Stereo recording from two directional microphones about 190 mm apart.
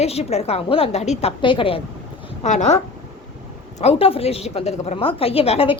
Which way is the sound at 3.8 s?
30° left (ahead or behind).